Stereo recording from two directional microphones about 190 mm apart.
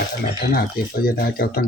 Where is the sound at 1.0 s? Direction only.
50° left (ahead or behind).